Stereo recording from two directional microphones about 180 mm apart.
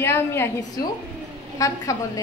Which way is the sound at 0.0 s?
15° left (ahead or behind).